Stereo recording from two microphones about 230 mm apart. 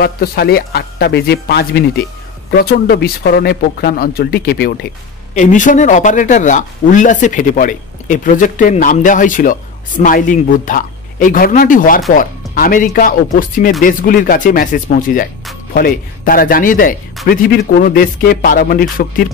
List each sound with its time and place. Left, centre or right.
0.0 s speech: left
5.3 s speech: left